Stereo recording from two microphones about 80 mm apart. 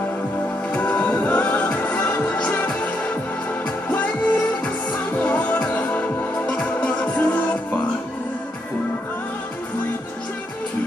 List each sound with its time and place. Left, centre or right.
0.7 s music: centre
3.9 s music: left